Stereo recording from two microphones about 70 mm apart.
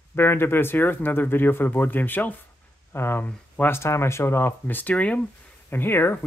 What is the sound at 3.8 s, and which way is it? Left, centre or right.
Speech, left.